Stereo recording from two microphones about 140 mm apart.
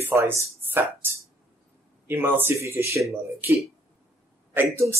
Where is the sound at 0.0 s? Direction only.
20° right (ahead or behind).